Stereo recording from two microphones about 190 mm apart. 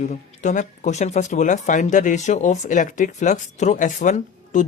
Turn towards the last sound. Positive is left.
turn(degrees=40)  # may be behind; listen again after turning